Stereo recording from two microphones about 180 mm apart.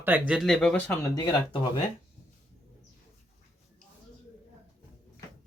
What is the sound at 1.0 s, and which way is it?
Speech, 20° left (ahead or behind).